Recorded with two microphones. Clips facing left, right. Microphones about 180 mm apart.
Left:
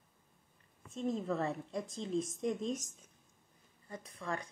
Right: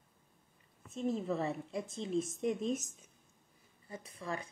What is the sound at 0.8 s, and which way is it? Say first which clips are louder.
A woman's voice: right 1 dB; 5° right (ahead or behind).